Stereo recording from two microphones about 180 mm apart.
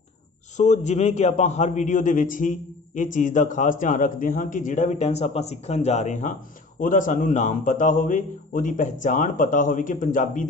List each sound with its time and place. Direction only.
0.6 s a man's voice: 40° left (ahead or behind)